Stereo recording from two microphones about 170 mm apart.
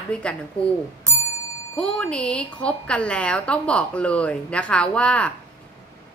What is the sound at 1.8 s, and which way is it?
A woman's voice, 5° left (ahead or behind).